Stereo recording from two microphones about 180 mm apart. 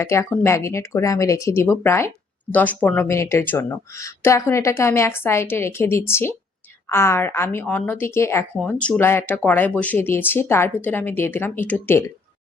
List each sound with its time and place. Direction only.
0.0 s speech: 15° left (ahead or behind)